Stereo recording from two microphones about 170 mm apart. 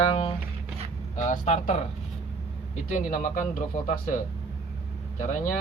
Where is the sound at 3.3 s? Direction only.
45° left (ahead or behind).